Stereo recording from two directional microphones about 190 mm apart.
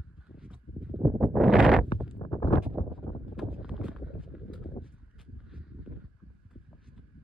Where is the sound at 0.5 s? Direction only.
5° right (ahead or behind).